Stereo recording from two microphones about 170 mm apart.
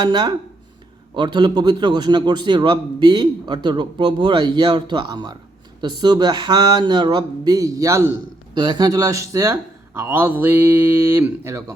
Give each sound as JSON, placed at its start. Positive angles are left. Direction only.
{"t": 0.0, "sound": "a man's voice", "side_deg": -25}